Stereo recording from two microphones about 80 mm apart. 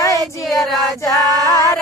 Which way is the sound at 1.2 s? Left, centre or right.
Right.